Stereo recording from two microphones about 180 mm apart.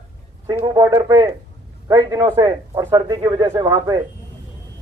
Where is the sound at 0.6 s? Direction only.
20° right (ahead or behind).